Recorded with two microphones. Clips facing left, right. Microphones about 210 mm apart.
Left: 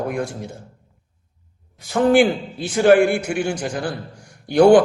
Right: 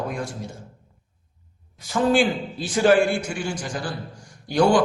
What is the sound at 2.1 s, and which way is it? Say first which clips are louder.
A man's voice: left 6 dB; 60° left (ahead or behind).